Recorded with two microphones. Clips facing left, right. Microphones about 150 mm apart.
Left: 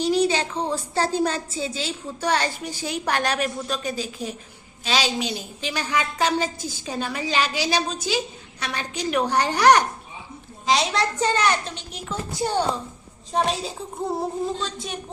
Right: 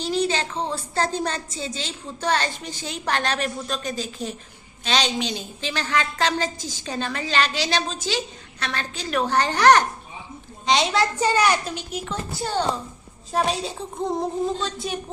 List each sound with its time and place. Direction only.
0.0 s a woman's voice: 15° left (ahead or behind)
10.7 s a child's voice: centre (ahead or behind)
12.3 s a woman's voice: 15° left (ahead or behind)
13.3 s a woman's voice: centre (ahead or behind)